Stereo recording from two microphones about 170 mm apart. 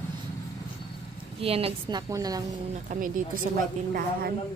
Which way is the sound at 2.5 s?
50° right (ahead or behind).